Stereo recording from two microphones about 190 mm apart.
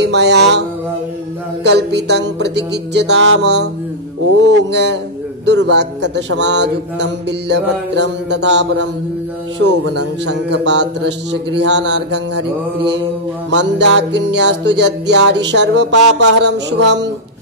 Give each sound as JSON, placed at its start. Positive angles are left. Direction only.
{"t": 0.0, "sound": "music", "side_deg": -65}
{"t": 9.6, "sound": "speech", "side_deg": -65}
{"t": 13.6, "sound": "music", "side_deg": -70}